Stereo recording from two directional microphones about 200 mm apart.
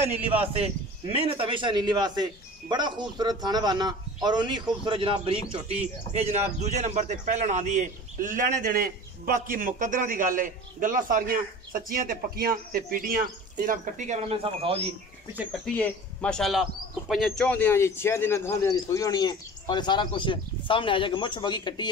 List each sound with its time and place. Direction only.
0.5 s a man's voice: 30° right (ahead or behind)
15.6 s a man's voice: 5° left (ahead or behind); by 21.8 s 20° left (ahead or behind)